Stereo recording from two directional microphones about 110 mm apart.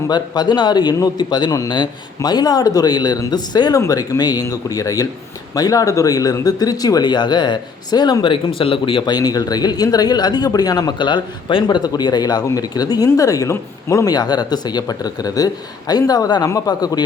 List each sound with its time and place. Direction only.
0.1 s speech: 40° left (ahead or behind)